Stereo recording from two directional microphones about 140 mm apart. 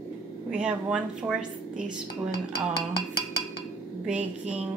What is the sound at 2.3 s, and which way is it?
Speech, 90° left.